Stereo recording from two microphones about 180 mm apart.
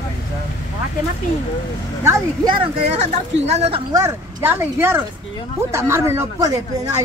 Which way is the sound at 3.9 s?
20° right (ahead or behind).